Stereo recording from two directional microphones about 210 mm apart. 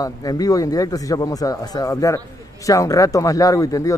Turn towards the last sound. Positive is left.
turn(degrees=15)  # may be behind; listen again after turning